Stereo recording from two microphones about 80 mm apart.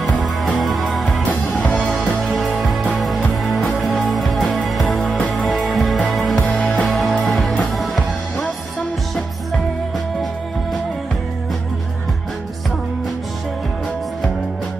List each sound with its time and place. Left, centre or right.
0.6 s music: centre
1.6 s music: centre
1.9 s music: centre
3.9 s music: centre
6.4 s music: centre
6.9 s music: centre